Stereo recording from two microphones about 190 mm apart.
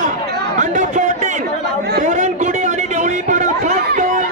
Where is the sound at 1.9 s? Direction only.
40° right (ahead or behind).